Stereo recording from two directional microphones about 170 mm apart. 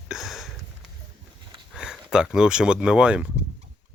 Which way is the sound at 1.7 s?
5° right (ahead or behind).